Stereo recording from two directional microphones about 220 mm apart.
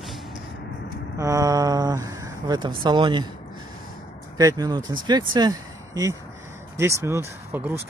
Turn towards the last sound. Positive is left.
turn(degrees=-10)  # may be behind; listen again after turning